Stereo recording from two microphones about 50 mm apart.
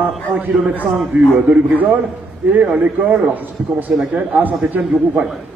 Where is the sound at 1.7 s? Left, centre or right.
Right.